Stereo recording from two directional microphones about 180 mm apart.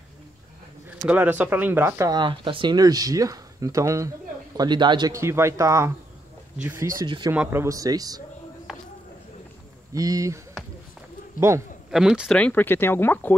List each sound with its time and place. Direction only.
1.0 s speech: 10° right (ahead or behind)
7.0 s speech: 20° right (ahead or behind)
8.7 s a sound: centre (ahead or behind)
9.9 s speech: 20° right (ahead or behind)
11.9 s speech: 5° right (ahead or behind)